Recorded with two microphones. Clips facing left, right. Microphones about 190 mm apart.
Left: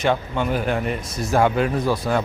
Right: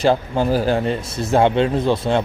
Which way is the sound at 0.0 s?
30° right (ahead or behind).